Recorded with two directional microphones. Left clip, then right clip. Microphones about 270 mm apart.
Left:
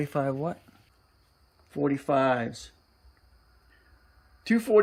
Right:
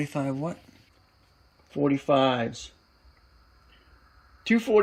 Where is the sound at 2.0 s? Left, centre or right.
Centre.